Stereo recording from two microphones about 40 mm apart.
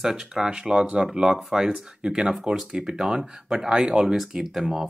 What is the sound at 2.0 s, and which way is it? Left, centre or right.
Speech, right.